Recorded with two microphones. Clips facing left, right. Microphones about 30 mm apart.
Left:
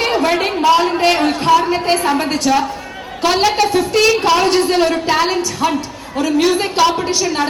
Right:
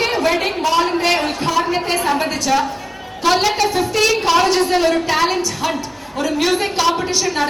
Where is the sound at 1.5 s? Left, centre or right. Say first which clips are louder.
Left 4 dB; centre.